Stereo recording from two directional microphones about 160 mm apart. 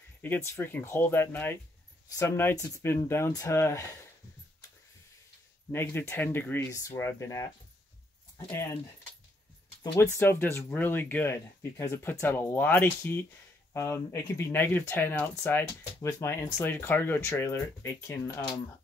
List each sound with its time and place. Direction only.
0.2 s speech: 15° left (ahead or behind)
5.7 s speech: 15° left (ahead or behind)
10.1 s speech: 15° left (ahead or behind)